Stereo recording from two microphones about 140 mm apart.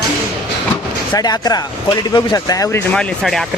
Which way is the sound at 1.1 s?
30° left (ahead or behind).